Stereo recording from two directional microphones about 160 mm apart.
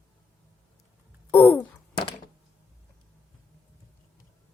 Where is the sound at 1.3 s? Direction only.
10° left (ahead or behind).